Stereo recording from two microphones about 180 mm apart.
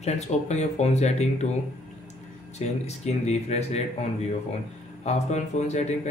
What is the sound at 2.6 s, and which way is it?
Speech, 35° left (ahead or behind).